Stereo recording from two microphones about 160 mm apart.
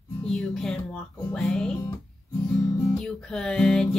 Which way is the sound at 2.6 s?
20° left (ahead or behind).